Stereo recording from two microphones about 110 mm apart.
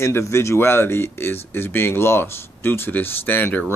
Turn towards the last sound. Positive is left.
turn(degrees=20)  # may be behind; listen again after turning